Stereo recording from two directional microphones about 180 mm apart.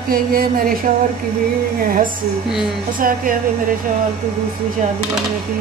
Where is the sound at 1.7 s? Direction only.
55° right (ahead or behind).